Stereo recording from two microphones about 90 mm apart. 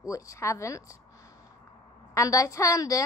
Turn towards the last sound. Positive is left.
turn(degrees=40)  # may be behind; listen again after turning